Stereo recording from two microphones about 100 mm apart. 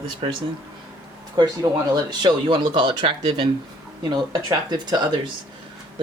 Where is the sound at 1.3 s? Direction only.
40° right (ahead or behind); by 3.5 s 55° right (ahead or behind).